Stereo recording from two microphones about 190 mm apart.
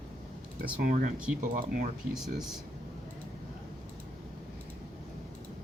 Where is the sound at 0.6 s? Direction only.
45° right (ahead or behind).